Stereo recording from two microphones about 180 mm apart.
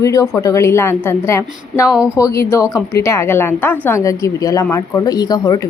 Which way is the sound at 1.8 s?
5° right (ahead or behind).